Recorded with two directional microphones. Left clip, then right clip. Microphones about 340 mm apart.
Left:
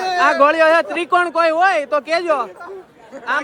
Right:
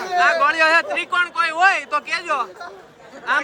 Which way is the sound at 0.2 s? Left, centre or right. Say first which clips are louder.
Left 3 dB; centre.